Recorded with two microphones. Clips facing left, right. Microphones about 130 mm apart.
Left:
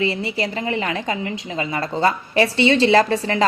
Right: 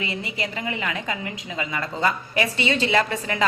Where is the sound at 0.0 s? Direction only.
35° left (ahead or behind).